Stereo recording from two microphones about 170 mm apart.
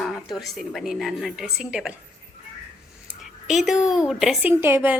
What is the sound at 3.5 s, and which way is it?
Speech, centre (ahead or behind).